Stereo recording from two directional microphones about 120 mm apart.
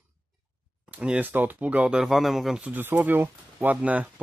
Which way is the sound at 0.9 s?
10° right (ahead or behind).